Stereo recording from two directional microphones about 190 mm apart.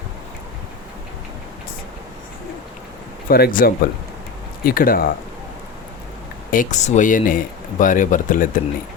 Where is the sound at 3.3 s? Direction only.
50° left (ahead or behind).